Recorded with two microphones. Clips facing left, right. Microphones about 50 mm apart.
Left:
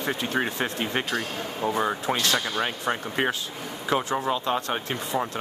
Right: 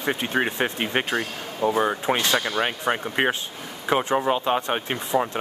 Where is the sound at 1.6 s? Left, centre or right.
Centre.